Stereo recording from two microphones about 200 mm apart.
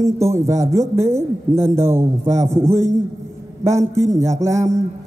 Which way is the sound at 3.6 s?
15° right (ahead or behind).